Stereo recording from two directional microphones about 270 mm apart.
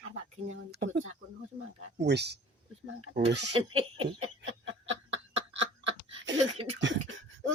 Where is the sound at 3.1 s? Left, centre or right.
Right.